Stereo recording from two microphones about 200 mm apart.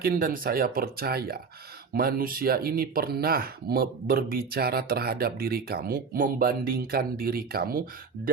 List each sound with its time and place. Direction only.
0.0 s speech: 45° right (ahead or behind)